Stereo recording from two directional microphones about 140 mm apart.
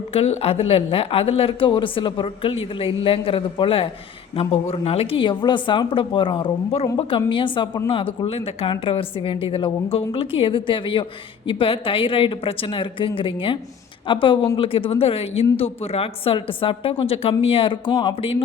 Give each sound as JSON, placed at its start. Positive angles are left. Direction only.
{"t": 0.1, "sound": "speech", "side_deg": 45}